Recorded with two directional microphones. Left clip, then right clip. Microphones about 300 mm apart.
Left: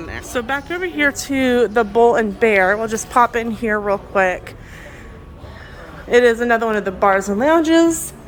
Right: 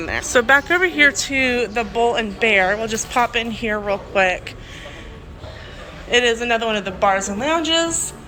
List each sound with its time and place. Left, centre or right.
0.0 s speech: centre
6.1 s speech: centre